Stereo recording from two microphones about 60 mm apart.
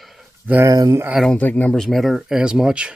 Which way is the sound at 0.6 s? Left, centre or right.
Right.